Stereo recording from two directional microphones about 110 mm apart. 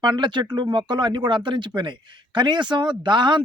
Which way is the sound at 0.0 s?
45° right (ahead or behind).